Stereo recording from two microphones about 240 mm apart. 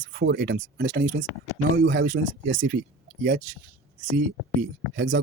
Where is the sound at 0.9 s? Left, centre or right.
Right.